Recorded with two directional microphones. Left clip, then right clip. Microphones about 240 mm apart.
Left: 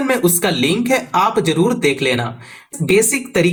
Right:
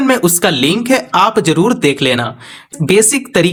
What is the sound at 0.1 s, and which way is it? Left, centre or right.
Speech, right.